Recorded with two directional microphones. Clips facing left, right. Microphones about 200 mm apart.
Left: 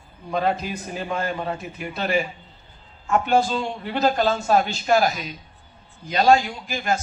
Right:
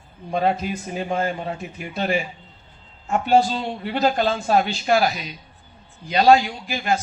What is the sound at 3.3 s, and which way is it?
A man's voice, 50° left (ahead or behind).